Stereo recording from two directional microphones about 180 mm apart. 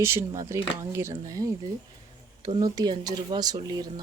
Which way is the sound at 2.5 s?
35° right (ahead or behind).